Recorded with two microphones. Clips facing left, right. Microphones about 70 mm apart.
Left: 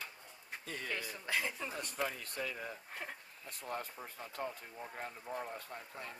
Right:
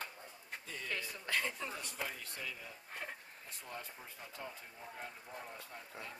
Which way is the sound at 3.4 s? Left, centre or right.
Left.